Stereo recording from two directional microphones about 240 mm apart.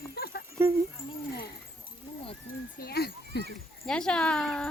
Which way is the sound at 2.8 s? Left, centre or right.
Left.